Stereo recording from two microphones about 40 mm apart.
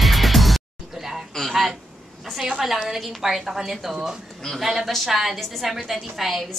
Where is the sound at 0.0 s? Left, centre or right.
Centre.